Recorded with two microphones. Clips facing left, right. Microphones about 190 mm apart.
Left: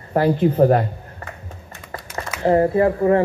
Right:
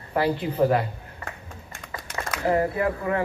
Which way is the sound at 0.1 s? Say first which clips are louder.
Left 7 dB; 45° left (ahead or behind).